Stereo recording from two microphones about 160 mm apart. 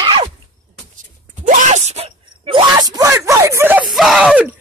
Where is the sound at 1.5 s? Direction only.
45° right (ahead or behind).